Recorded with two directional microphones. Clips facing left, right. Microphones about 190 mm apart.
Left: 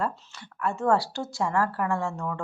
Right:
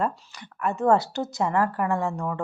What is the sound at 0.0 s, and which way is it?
Speech, 20° right (ahead or behind).